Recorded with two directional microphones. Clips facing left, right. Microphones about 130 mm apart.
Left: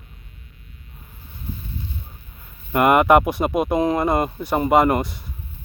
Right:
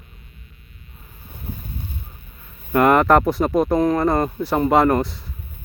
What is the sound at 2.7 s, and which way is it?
Speech, 10° left (ahead or behind).